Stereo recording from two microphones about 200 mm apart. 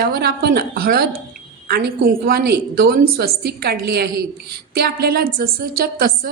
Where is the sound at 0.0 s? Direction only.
50° right (ahead or behind).